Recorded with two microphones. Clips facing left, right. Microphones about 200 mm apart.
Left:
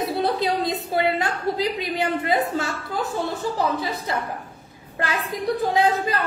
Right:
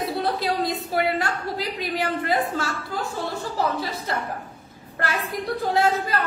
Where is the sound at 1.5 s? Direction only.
55° left (ahead or behind).